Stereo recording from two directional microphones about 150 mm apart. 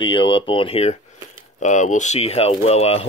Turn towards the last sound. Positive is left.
turn(degrees=45)  # may be behind; listen again after turning